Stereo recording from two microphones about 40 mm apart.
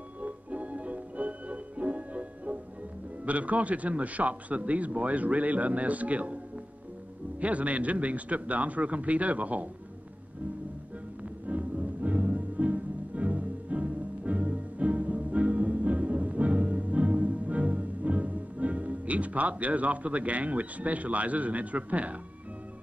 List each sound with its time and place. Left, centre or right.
0.2 s music: right
3.3 s a man's voice: right
11.4 s music: right